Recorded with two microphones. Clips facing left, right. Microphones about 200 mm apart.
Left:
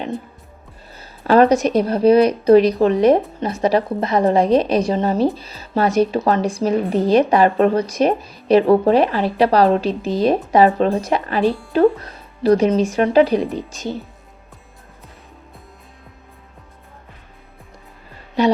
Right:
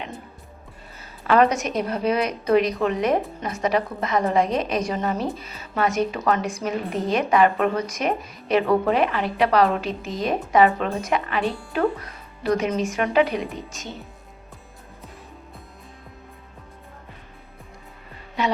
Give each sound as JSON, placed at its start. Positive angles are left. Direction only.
{"t": 0.9, "sound": "a woman's voice", "side_deg": 35}